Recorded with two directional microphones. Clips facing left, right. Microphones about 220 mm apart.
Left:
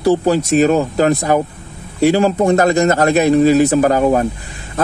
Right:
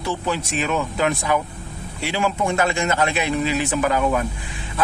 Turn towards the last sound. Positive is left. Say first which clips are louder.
# left 7 dB
turn(degrees=40)  # may be behind; listen again after turning